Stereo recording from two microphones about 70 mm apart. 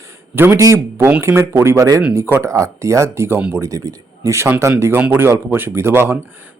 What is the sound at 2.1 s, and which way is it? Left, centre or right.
Speech, right.